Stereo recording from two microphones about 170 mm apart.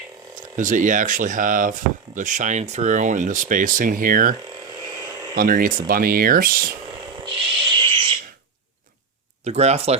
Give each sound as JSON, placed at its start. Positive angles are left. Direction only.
{"t": 0.3, "sound": "speech", "side_deg": -50}
{"t": 5.4, "sound": "speech", "side_deg": -55}
{"t": 7.8, "sound": "a sound", "side_deg": -30}
{"t": 9.4, "sound": "speech", "side_deg": -40}